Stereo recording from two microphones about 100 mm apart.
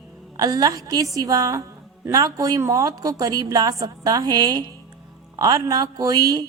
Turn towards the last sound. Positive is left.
turn(degrees=-40)  # may be behind; listen again after turning